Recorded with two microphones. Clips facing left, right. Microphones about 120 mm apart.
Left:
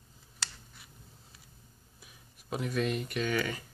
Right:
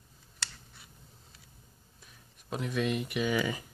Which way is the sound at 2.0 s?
5° left (ahead or behind).